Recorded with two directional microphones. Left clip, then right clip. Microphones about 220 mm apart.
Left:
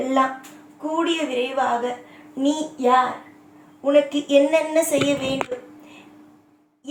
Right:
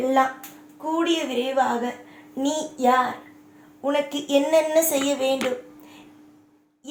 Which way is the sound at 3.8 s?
50° right (ahead or behind).